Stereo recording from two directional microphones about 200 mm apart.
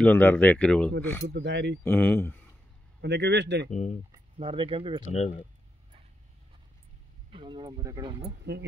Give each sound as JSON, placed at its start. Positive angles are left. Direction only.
{"t": 0.0, "sound": "speech", "side_deg": 10}
{"t": 1.3, "sound": "speech", "side_deg": -65}
{"t": 1.9, "sound": "speech", "side_deg": 5}
{"t": 3.0, "sound": "speech", "side_deg": -60}
{"t": 3.7, "sound": "speech", "side_deg": 35}
{"t": 4.1, "sound": "speech", "side_deg": -25}
{"t": 5.1, "sound": "speech", "side_deg": 30}
{"t": 7.2, "sound": "speech", "side_deg": -25}
{"t": 8.2, "sound": "speech", "side_deg": -55}